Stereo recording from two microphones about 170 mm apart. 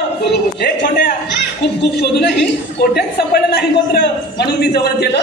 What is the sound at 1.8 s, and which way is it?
Speech, 90° left.